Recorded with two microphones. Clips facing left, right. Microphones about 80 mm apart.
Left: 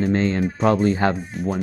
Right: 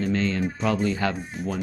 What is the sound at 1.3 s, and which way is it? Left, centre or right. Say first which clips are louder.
Speech: left 5 dB; centre.